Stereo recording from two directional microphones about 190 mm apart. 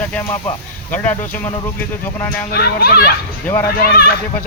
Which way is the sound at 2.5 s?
55° left (ahead or behind).